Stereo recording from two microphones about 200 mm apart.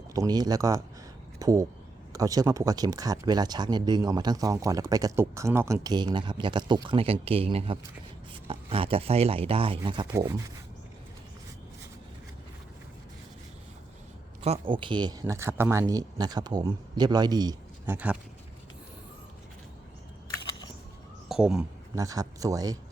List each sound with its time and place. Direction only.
0.1 s speech: 20° right (ahead or behind)
14.4 s speech: 30° right (ahead or behind)
17.9 s speech: 5° right (ahead or behind)
20.3 s a sound: 20° left (ahead or behind)
21.2 s a sound: centre (ahead or behind)
21.9 s speech: 15° right (ahead or behind)